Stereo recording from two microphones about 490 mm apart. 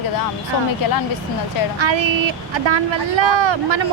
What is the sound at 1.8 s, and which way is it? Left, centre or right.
Speech, right.